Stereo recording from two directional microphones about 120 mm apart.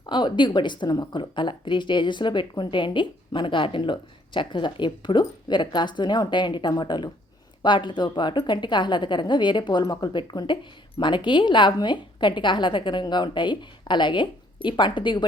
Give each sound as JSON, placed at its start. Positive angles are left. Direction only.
{"t": 0.0, "sound": "a woman's voice", "side_deg": 40}